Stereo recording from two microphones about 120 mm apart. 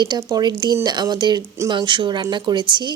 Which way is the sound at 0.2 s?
35° right (ahead or behind).